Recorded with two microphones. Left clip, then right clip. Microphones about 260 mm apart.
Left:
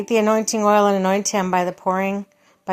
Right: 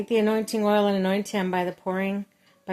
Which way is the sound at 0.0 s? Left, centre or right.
Centre.